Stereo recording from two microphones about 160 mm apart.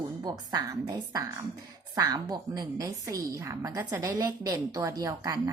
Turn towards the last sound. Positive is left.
turn(degrees=-25)  # may be behind; listen again after turning